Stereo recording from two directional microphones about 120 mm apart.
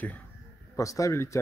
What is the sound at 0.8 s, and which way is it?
Speech, 25° left (ahead or behind).